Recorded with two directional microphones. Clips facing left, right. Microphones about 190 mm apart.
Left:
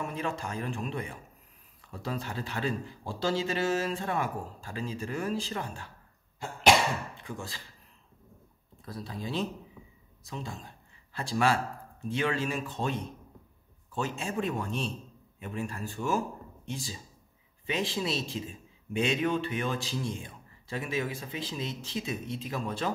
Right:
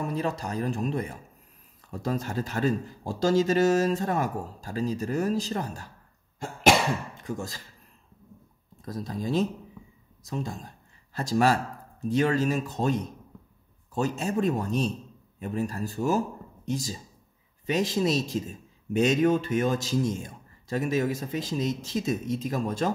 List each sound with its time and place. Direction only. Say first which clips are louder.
0.0 s a man's voice: right 5 dB; 35° right (ahead or behind)
7.2 s a man's voice: right 6 dB; 40° right (ahead or behind)
8.8 s a man's voice: right 6 dB; 45° right (ahead or behind)